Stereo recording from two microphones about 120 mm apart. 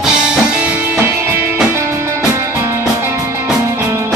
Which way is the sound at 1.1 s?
20° right (ahead or behind).